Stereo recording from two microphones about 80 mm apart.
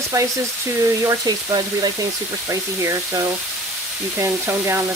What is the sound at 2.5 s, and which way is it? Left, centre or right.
Speech, right.